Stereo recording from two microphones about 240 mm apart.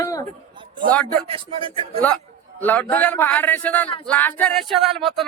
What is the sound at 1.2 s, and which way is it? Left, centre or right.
Speech, right.